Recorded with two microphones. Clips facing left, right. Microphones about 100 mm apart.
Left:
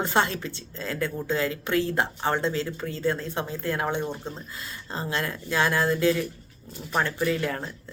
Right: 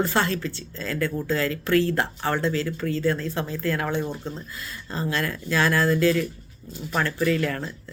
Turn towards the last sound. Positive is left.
turn(degrees=20)  # may be behind; listen again after turning